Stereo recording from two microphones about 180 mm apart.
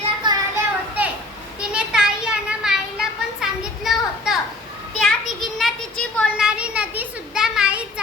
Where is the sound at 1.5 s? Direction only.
5° right (ahead or behind).